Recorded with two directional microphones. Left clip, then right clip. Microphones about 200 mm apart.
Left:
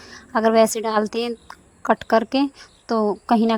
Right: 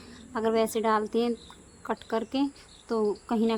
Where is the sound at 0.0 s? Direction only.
35° left (ahead or behind).